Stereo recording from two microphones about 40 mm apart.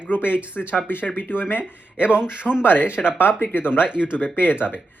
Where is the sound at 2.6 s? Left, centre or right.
Left.